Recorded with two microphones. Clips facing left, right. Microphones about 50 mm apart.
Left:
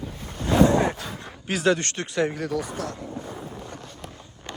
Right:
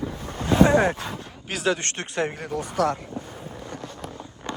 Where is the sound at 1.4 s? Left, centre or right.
Centre.